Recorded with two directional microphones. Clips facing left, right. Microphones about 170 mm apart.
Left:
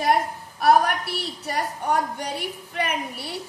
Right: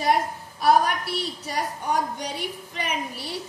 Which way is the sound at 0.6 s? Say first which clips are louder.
Left 1 dB; 60° left (ahead or behind).